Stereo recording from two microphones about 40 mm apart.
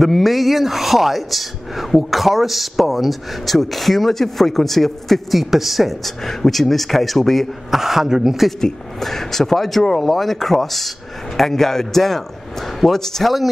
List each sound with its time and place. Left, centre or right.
0.0 s a woman's voice: centre
6.2 s a woman's voice: centre
7.8 s speech: centre
9.0 s a woman's voice: centre